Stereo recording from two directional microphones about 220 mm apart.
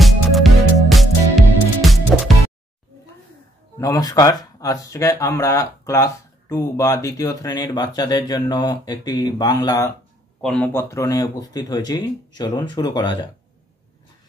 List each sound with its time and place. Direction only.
0.0 s music: centre (ahead or behind)
3.7 s speech: 15° left (ahead or behind)